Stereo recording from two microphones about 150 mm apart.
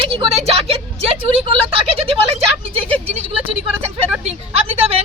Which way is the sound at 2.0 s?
40° right (ahead or behind).